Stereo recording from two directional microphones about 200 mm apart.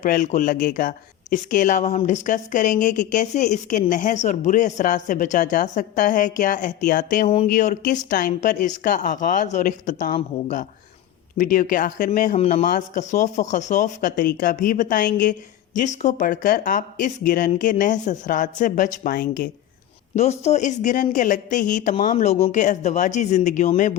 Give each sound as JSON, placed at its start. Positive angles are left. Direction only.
{"t": 0.0, "sound": "speech", "side_deg": 40}
{"t": 11.3, "sound": "speech", "side_deg": 40}
{"t": 20.1, "sound": "speech", "side_deg": 35}